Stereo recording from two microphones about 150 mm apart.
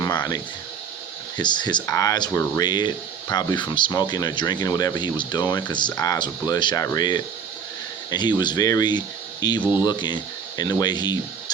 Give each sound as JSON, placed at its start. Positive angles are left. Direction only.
{"t": 1.4, "sound": "speech", "side_deg": 30}